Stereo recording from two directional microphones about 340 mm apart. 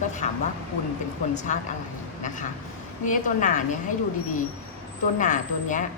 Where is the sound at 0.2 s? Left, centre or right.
Centre.